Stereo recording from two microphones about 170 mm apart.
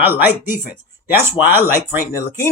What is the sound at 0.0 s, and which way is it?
Speech, 10° right (ahead or behind).